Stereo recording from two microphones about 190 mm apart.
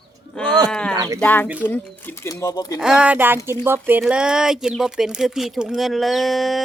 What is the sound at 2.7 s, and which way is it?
Speech, 5° right (ahead or behind).